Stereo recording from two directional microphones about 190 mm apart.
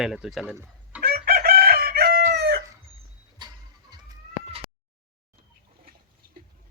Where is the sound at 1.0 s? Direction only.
55° right (ahead or behind).